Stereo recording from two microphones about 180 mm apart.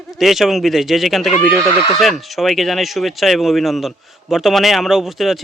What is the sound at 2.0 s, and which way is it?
Speech, centre (ahead or behind).